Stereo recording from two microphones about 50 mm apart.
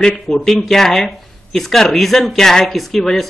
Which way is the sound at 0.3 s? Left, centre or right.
Centre.